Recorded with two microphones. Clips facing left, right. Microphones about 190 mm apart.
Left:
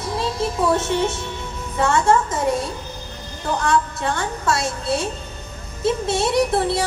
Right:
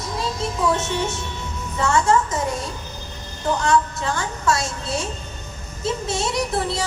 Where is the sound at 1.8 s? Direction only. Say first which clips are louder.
Left 2 dB; 55° left (ahead or behind).